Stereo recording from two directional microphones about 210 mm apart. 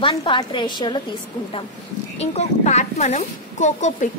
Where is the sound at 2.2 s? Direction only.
30° left (ahead or behind).